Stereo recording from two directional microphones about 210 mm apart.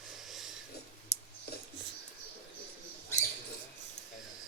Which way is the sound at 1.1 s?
35° left (ahead or behind).